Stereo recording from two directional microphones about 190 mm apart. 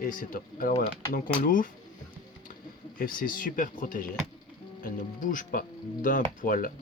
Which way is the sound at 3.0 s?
45° left (ahead or behind).